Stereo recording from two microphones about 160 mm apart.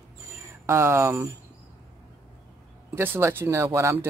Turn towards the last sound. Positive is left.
turn(degrees=-15)  # may be behind; listen again after turning